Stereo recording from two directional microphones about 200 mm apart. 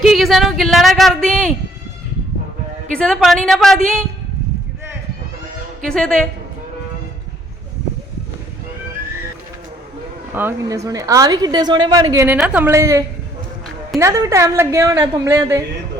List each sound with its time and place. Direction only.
0.0 s speech: centre (ahead or behind)
2.9 s speech: 5° left (ahead or behind)
5.8 s speech: 5° left (ahead or behind)
10.3 s a woman's voice: 15° right (ahead or behind)